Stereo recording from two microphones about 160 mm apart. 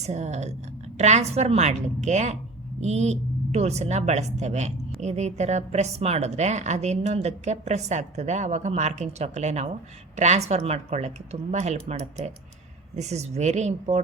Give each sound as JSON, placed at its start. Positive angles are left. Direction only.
{"t": 0.0, "sound": "a woman's voice", "side_deg": -45}